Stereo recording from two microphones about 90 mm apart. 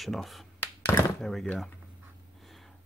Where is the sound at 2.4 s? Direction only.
Centre (ahead or behind).